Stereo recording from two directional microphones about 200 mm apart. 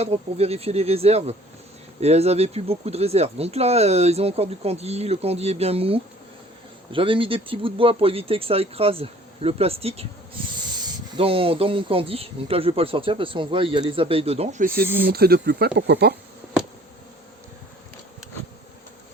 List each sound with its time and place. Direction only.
0.0 s speech: 30° right (ahead or behind)
11.2 s speech: 25° right (ahead or behind)
15.0 s speech: 50° right (ahead or behind)